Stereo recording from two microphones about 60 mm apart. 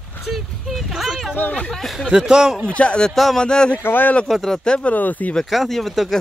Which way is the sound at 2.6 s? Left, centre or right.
Centre.